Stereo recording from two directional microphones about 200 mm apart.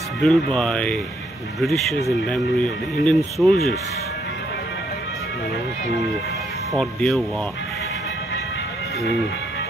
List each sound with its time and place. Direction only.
0.2 s speech: centre (ahead or behind)
6.7 s speech: centre (ahead or behind)